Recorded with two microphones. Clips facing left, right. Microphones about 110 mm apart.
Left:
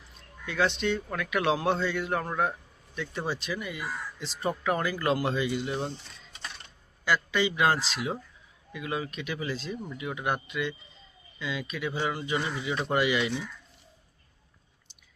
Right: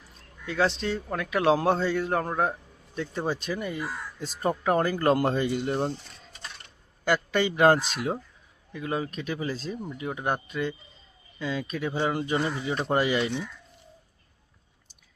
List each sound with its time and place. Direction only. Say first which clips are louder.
0.4 s speech: right 1 dB; 35° right (ahead or behind)
3.2 s speech: right 4 dB; 45° right (ahead or behind)
7.0 s speech: right 2 dB; 50° right (ahead or behind)